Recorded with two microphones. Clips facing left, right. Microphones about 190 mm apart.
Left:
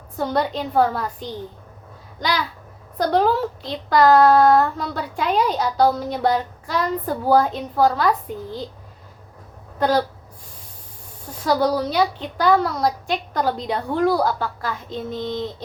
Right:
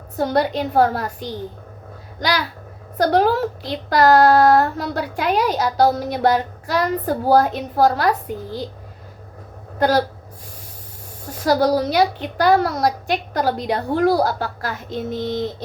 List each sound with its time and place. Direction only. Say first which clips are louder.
0.2 s a child's voice: right 3 dB; 75° right (ahead or behind)
9.7 s speech: right 2 dB; 75° right (ahead or behind)
11.3 s a child's voice: right 3 dB; 80° right